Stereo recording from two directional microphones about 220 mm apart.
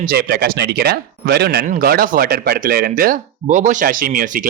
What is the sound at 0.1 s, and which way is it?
Speech, 45° right (ahead or behind).